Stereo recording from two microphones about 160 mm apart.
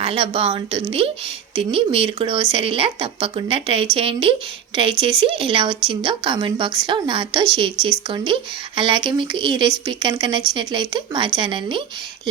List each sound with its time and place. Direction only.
0.0 s a woman's voice: 35° right (ahead or behind)